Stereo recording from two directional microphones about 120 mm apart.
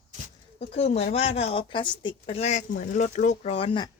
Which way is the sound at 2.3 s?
80° left.